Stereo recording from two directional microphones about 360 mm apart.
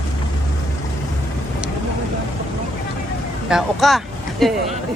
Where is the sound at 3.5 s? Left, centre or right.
Centre.